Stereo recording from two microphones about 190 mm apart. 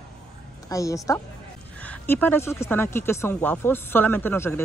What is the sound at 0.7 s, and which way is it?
Speech, 15° left (ahead or behind).